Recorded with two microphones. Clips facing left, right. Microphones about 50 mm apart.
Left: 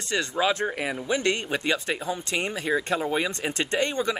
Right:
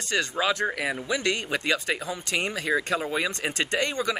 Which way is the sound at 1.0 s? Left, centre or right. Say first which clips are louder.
Left 4 dB; left.